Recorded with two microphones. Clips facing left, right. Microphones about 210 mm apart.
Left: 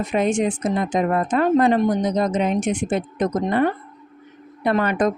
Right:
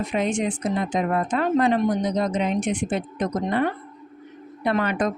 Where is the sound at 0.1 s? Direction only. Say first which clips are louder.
Left 6 dB; 50° left (ahead or behind).